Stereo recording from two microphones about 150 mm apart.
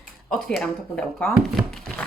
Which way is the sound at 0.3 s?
5° left (ahead or behind).